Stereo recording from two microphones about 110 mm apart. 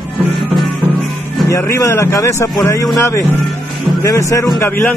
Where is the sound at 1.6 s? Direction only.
25° left (ahead or behind).